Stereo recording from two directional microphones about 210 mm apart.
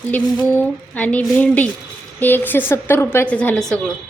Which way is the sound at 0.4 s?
10° left (ahead or behind).